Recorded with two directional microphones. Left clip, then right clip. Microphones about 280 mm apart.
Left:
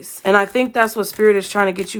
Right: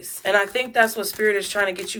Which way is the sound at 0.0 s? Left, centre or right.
Left.